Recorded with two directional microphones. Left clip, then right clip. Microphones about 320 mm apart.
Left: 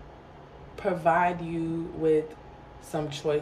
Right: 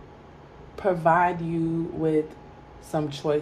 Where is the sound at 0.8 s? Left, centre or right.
Centre.